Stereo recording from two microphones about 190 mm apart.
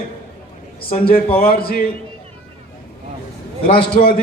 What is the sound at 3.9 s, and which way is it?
Speech, 50° left (ahead or behind).